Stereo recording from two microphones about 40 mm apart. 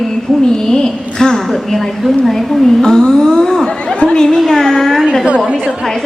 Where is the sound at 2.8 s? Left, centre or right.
Centre.